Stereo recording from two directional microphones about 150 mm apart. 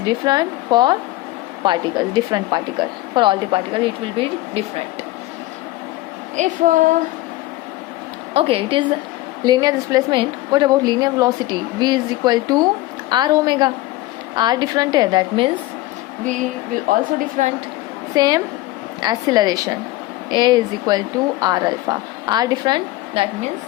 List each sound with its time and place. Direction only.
0.0 s a woman's voice: 30° right (ahead or behind)
6.3 s a woman's voice: 55° right (ahead or behind)
8.3 s a woman's voice: 40° right (ahead or behind)
16.9 s a woman's voice: 60° right (ahead or behind)
18.1 s a woman's voice: 25° right (ahead or behind)